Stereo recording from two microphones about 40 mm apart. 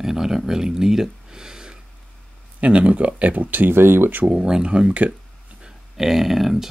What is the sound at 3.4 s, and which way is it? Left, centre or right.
Speech, right.